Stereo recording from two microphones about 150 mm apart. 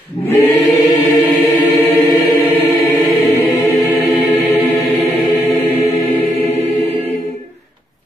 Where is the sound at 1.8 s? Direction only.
15° left (ahead or behind).